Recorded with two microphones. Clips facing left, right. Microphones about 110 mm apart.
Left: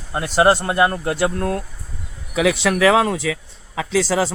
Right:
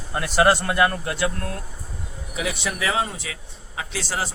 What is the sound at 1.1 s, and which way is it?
Speech, 45° left (ahead or behind).